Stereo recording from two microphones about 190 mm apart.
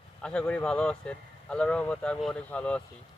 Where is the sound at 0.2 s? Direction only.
5° left (ahead or behind).